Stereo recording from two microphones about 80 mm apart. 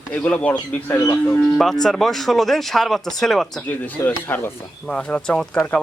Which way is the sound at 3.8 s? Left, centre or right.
Left.